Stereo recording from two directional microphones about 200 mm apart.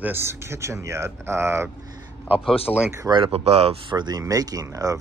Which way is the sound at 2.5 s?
30° left (ahead or behind).